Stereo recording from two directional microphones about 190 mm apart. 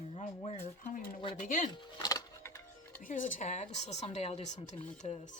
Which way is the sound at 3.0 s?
45° left (ahead or behind).